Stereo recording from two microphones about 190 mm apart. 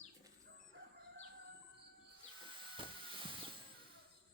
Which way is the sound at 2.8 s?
25° right (ahead or behind).